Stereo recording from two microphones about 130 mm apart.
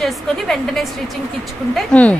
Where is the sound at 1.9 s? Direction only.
5° left (ahead or behind).